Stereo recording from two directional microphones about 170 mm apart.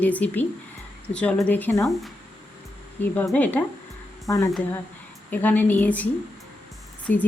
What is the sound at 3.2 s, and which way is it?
Speech, 10° left (ahead or behind).